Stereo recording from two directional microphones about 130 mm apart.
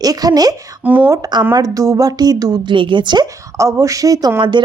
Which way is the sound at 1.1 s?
30° right (ahead or behind).